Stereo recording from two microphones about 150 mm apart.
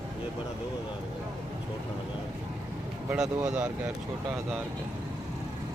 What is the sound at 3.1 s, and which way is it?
Speech, 5° right (ahead or behind).